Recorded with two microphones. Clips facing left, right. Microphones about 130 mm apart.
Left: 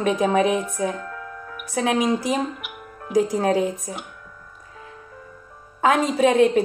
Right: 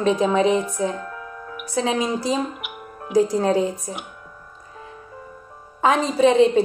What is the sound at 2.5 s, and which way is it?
Music, 20° right (ahead or behind).